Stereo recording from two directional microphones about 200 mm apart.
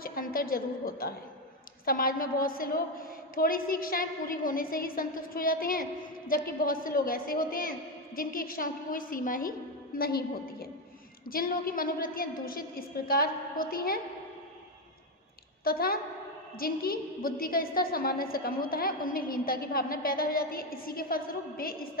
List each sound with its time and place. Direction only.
0.0 s a woman's voice: 45° left (ahead or behind)
15.6 s a woman's voice: 50° left (ahead or behind)